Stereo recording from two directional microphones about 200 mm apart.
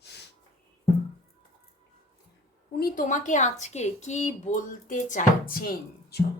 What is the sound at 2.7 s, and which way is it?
Speech, 45° left (ahead or behind).